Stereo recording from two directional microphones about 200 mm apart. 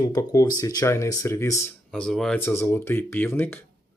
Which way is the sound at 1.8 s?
5° left (ahead or behind).